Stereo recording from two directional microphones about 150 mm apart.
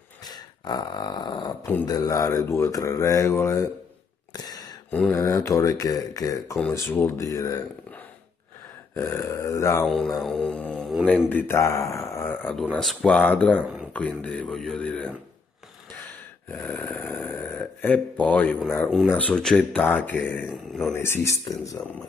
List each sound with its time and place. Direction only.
0.2 s a sound: 25° left (ahead or behind)
1.9 s speech: 25° left (ahead or behind)
4.3 s throat clearing: 25° left (ahead or behind)
5.1 s speech: 20° left (ahead or behind)
8.9 s speech: 15° left (ahead or behind)
9.8 s music: centre (ahead or behind)
11.2 s speech: 15° left (ahead or behind)
16.4 s snoring: 10° left (ahead or behind)
19.0 s speech: 10° left (ahead or behind)
20.4 s music: centre (ahead or behind)
20.9 s speech: 15° left (ahead or behind)